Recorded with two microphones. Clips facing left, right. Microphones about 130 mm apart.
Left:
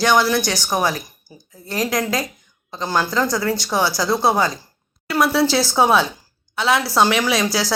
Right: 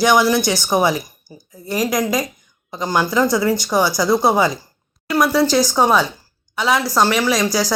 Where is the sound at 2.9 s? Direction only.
15° right (ahead or behind).